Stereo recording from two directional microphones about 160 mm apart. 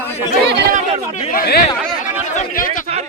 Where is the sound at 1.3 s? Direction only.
75° left (ahead or behind).